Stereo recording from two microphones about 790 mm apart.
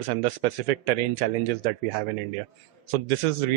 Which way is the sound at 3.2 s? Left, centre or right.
Right.